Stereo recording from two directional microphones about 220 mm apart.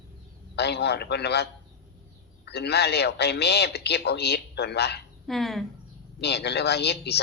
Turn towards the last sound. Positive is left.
turn(degrees=50)  # may be behind; listen again after turning